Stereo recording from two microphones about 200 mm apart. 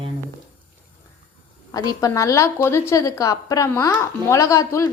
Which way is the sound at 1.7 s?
20° left (ahead or behind).